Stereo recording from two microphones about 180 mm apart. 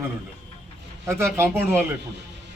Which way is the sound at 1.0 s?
15° right (ahead or behind).